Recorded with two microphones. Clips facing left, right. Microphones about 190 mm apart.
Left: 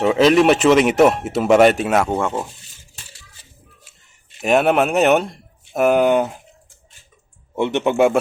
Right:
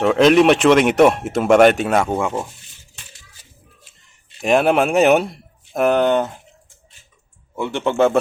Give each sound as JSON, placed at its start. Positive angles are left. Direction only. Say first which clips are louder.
{"t": 0.0, "sound": "speech", "louder": "right 1 dB", "side_deg": 0}
{"t": 4.4, "sound": "speech", "louder": "even", "side_deg": 5}
{"t": 7.5, "sound": "speech", "louder": "left 2 dB", "side_deg": 20}